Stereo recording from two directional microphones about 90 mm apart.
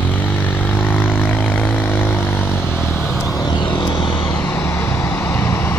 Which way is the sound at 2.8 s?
5° right (ahead or behind).